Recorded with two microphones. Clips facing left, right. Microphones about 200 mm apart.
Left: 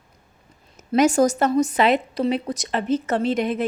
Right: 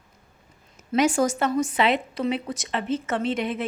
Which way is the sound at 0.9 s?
40° left (ahead or behind).